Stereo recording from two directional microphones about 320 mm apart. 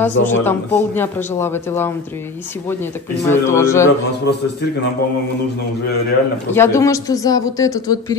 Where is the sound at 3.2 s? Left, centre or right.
Centre.